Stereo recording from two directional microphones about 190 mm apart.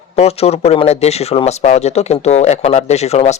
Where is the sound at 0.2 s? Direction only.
35° left (ahead or behind).